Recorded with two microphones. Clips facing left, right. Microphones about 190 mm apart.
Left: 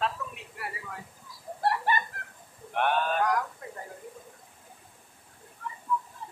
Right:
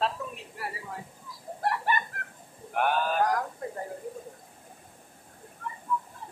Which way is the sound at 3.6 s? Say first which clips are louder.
Right 7 dB; 35° right (ahead or behind).